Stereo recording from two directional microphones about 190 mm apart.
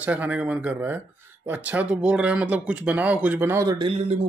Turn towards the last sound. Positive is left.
turn(degrees=-35)  # may be behind; listen again after turning